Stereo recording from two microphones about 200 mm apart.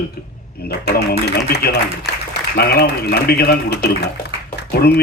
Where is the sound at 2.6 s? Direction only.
50° left (ahead or behind).